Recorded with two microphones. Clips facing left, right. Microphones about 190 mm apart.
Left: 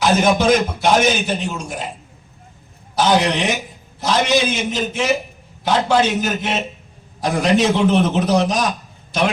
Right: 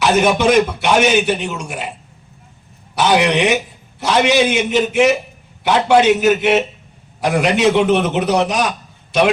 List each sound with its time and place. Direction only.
0.0 s a man's voice: 70° right (ahead or behind)
2.9 s a man's voice: 70° right (ahead or behind)